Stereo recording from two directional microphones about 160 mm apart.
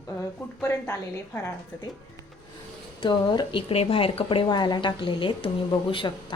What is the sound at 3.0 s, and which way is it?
A woman's voice, 30° left (ahead or behind).